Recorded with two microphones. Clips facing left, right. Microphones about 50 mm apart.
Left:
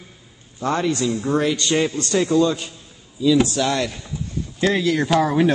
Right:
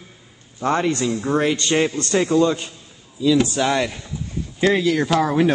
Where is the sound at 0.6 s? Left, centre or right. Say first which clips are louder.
Right 1 dB; right.